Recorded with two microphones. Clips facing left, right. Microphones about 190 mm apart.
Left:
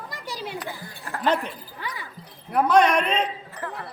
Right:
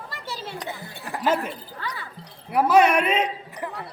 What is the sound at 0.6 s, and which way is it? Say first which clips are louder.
Speech: right 1 dB; 20° right (ahead or behind).